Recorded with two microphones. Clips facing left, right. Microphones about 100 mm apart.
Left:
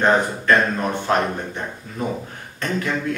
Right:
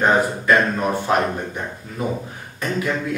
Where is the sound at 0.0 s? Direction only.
5° right (ahead or behind).